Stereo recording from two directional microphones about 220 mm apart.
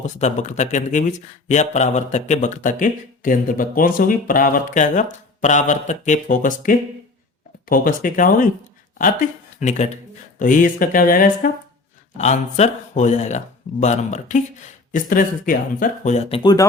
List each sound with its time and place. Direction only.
0.0 s speech: 30° left (ahead or behind)
16.4 s speech: 20° left (ahead or behind)